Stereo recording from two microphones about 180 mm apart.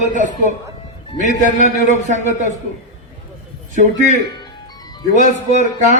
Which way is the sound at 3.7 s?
45° right (ahead or behind).